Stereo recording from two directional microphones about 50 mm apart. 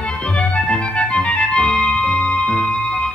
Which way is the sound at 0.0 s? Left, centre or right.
Left.